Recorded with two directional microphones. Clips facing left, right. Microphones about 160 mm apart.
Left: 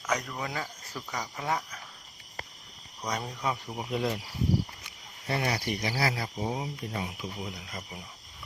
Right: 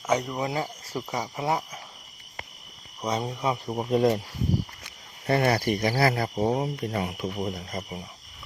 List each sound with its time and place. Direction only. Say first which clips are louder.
0.1 s speech: right 6 dB; 25° right (ahead or behind)
3.0 s speech: right 5 dB; 25° right (ahead or behind)
3.7 s speech: right 8 dB; 45° right (ahead or behind)
5.2 s speech: right 8 dB; 55° right (ahead or behind); by 8.0 s 35° right (ahead or behind)